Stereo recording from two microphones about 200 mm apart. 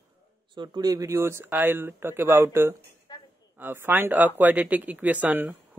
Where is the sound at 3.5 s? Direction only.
10° right (ahead or behind).